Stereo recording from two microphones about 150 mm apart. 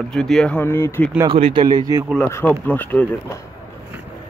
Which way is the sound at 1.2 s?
35° right (ahead or behind).